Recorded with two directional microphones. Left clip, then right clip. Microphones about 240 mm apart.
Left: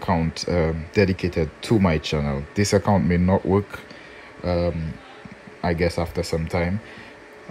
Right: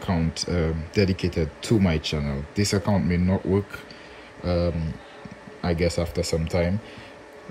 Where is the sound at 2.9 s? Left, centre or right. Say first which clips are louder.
Left 5 dB; right.